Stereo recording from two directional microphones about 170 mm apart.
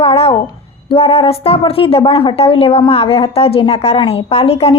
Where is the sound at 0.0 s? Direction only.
35° left (ahead or behind).